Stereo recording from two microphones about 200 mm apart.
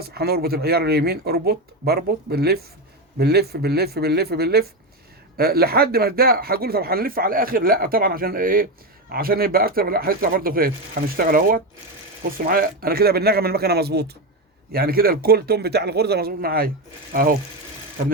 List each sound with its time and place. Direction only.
0.0 s speech: 50° right (ahead or behind)